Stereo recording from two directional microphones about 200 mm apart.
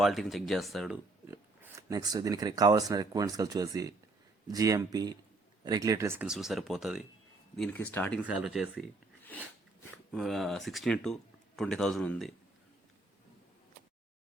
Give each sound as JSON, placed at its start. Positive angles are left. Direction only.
{"t": 0.0, "sound": "speech", "side_deg": 0}
{"t": 1.3, "sound": "speech", "side_deg": -15}
{"t": 8.2, "sound": "speech", "side_deg": -5}
{"t": 10.1, "sound": "speech", "side_deg": 0}